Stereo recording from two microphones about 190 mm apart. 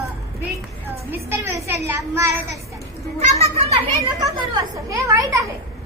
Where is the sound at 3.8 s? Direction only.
25° right (ahead or behind).